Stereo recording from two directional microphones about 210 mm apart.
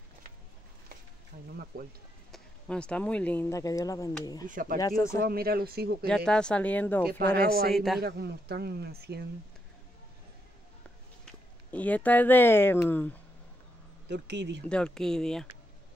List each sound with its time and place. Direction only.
1.3 s a sound: 45° right (ahead or behind)
1.7 s speech: 45° right (ahead or behind)
2.3 s speech: 5° left (ahead or behind)
4.5 s speech: 40° right (ahead or behind)
4.7 s speech: 15° left (ahead or behind)
5.2 s speech: 45° right (ahead or behind)
6.0 s speech: 5° left (ahead or behind)
7.3 s speech: 45° right (ahead or behind)
7.7 s speech: centre (ahead or behind)
8.0 s speech: 50° right (ahead or behind)
11.7 s speech: 5° left (ahead or behind)
14.0 s speech: 55° right (ahead or behind)
14.6 s speech: 5° left (ahead or behind)